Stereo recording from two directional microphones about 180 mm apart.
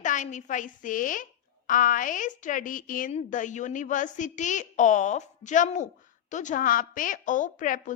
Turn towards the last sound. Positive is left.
turn(degrees=45)  # may be behind; listen again after turning